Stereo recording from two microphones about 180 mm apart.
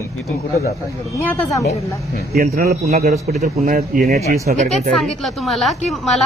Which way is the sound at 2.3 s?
55° right (ahead or behind).